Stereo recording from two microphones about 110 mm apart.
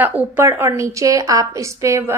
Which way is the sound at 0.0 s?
20° right (ahead or behind).